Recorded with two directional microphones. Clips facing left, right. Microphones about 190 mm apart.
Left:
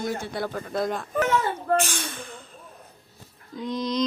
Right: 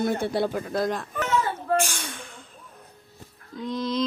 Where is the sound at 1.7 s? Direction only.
10° right (ahead or behind).